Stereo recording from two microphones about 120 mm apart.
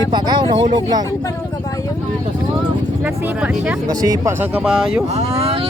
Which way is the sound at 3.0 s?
10° right (ahead or behind).